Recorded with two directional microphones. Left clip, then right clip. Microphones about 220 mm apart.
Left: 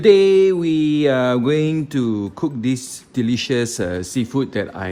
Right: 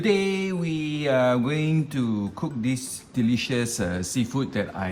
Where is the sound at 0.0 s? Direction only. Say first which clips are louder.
Left 13 dB; 45° left (ahead or behind).